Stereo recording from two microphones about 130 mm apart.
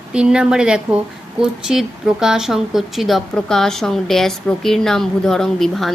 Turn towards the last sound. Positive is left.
turn(degrees=0)  # may be behind; listen again after turning